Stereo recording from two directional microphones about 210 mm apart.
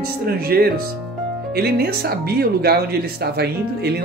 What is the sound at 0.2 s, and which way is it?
Speech, 45° right (ahead or behind).